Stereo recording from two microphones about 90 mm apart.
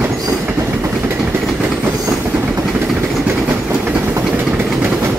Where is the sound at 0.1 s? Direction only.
30° right (ahead or behind).